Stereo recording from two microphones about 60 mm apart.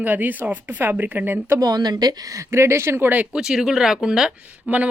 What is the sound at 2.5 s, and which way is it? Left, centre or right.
Speech, right.